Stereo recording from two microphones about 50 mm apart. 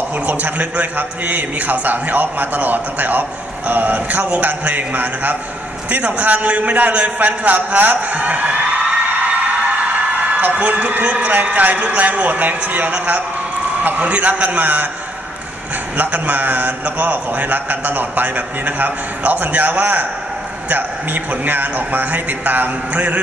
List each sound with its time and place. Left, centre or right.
0.3 s a man's voice: right
9.3 s a sound: right
11.4 s a man's voice: right
16.0 s a man's voice: right